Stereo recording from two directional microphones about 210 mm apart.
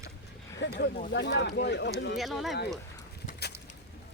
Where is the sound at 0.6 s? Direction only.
55° left (ahead or behind).